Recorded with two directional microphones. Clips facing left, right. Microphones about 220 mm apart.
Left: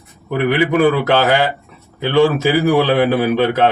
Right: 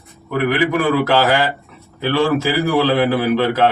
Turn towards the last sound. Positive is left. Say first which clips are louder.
# left 1 dB
turn(degrees=20)  # may be behind; listen again after turning